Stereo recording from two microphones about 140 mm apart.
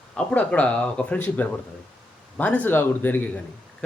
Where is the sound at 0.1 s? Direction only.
10° left (ahead or behind).